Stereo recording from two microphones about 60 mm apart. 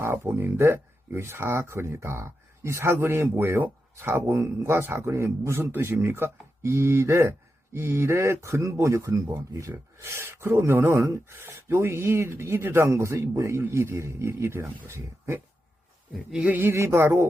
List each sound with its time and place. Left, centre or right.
0.0 s speech: right
9.7 s speech: right
16.5 s speech: right
16.7 s speech: right